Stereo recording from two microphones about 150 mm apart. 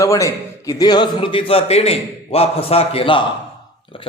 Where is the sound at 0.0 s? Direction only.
20° left (ahead or behind).